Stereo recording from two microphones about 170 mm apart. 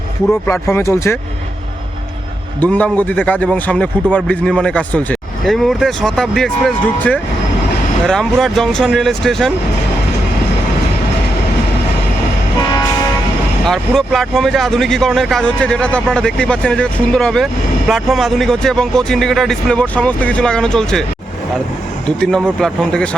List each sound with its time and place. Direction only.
0.4 s a man's voice: 15° left (ahead or behind)
2.6 s a man's voice: 10° left (ahead or behind)
13.7 s speech: centre (ahead or behind)
22.0 s speech: 5° left (ahead or behind)